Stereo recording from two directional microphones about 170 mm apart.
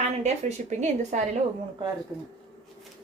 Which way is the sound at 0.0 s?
40° right (ahead or behind).